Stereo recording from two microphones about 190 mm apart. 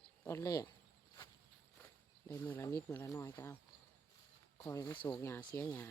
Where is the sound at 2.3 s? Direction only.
10° left (ahead or behind).